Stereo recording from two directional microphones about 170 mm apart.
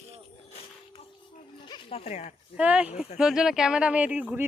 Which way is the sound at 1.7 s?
30° left (ahead or behind).